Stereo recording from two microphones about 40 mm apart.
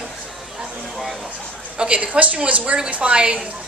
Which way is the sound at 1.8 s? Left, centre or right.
Right.